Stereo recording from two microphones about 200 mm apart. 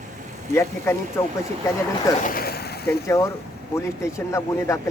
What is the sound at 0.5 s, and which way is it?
Speech, 15° left (ahead or behind).